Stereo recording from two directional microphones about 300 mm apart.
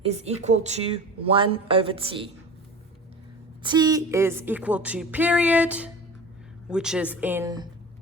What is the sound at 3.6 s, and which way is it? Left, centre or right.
A woman's voice, centre.